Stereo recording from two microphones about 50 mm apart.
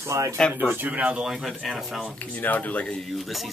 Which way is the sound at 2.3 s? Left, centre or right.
Left.